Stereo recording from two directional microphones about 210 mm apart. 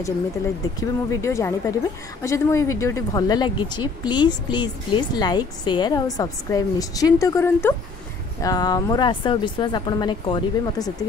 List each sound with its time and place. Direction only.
0.7 s a woman's voice: 15° left (ahead or behind)